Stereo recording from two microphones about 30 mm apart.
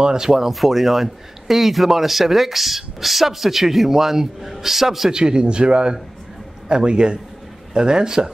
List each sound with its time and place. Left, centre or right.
0.0 s speech: right
0.5 s speech: centre
5.1 s speech: right